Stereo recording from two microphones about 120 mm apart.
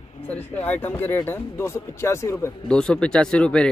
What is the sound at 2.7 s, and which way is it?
Speech, 10° left (ahead or behind).